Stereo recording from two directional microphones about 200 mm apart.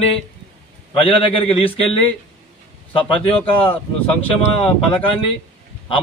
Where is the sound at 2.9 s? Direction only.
30° left (ahead or behind).